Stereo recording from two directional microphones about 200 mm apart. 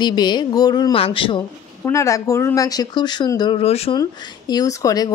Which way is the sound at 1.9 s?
15° left (ahead or behind).